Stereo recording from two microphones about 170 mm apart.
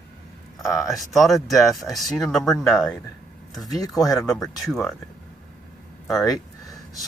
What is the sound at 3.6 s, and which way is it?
Speech, 20° left (ahead or behind).